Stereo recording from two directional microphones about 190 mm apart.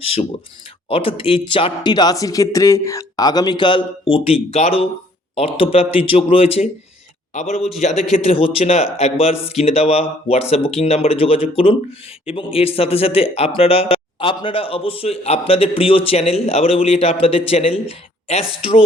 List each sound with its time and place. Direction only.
0.0 s speech: 30° left (ahead or behind)